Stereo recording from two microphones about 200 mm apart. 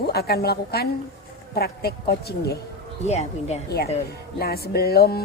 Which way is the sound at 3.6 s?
50° left (ahead or behind).